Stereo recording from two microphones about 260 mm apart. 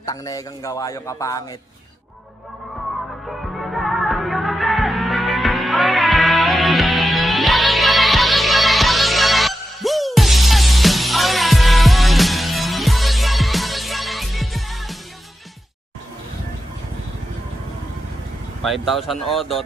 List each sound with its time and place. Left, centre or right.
0.0 s speech: centre
3.2 s music: centre
18.6 s speech: centre